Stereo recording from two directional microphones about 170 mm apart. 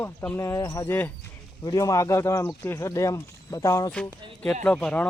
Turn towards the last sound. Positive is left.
turn(degrees=5)  # may be behind; listen again after turning